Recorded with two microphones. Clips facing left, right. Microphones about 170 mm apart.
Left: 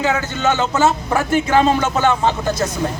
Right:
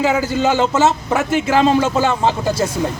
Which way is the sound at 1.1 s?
Centre (ahead or behind).